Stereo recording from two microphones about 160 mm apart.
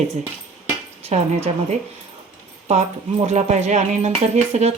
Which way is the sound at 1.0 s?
45° right (ahead or behind).